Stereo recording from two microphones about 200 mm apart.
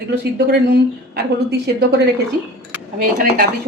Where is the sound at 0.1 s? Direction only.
55° right (ahead or behind).